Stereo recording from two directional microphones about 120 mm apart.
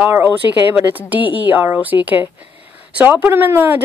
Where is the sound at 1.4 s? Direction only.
15° right (ahead or behind).